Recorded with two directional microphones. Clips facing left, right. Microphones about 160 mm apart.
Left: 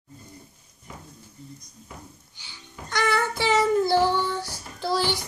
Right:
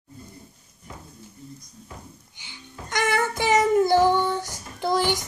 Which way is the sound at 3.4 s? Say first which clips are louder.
Right 2 dB; 15° right (ahead or behind).